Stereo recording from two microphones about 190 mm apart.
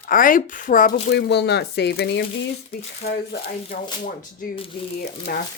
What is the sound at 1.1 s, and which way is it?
Speech, 65° left (ahead or behind).